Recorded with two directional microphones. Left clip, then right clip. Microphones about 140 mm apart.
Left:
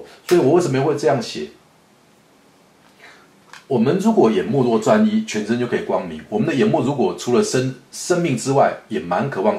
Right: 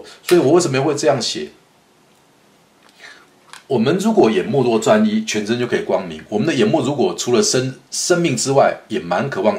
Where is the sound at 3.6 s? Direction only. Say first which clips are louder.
Right 1 dB; 35° right (ahead or behind).